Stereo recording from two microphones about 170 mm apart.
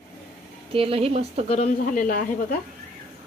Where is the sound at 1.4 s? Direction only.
40° left (ahead or behind).